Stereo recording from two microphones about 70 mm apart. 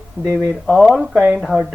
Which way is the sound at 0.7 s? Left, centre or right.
Centre.